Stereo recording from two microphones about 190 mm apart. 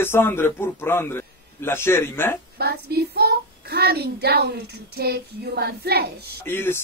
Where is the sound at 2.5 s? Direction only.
55° right (ahead or behind).